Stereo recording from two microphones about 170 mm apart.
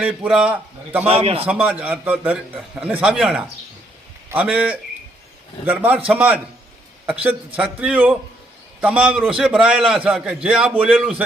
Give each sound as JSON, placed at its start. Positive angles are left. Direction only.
{"t": 0.0, "sound": "a man's voice", "side_deg": -5}
{"t": 1.0, "sound": "a man's voice", "side_deg": -35}
{"t": 1.6, "sound": "a man's voice", "side_deg": -10}